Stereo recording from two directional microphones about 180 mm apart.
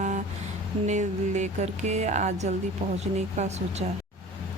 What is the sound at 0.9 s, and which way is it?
Speech, 40° right (ahead or behind).